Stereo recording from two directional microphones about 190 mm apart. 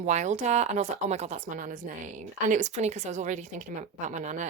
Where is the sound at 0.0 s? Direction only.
40° right (ahead or behind).